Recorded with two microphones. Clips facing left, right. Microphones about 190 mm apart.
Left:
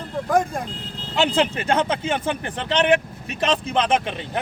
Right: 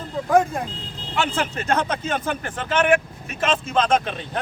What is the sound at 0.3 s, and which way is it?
Speech, 5° right (ahead or behind).